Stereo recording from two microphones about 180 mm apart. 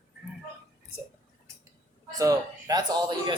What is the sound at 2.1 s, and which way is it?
Speech, 20° right (ahead or behind).